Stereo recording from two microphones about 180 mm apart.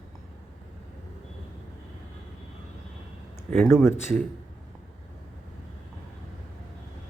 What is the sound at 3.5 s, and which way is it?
Speech, centre (ahead or behind).